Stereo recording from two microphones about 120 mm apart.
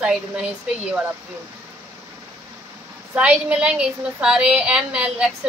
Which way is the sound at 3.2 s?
10° right (ahead or behind).